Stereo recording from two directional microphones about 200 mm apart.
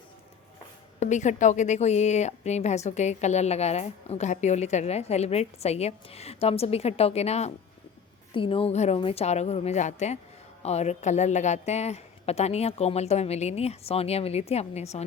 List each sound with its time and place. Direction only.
0.9 s a woman's voice: 35° left (ahead or behind)